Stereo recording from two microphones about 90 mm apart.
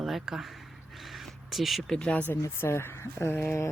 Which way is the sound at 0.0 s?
5° right (ahead or behind).